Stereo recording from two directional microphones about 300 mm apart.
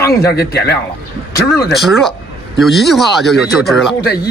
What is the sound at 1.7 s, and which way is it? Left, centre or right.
Speech, centre.